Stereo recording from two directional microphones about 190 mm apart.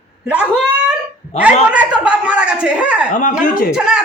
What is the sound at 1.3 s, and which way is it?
Speech, 35° left (ahead or behind).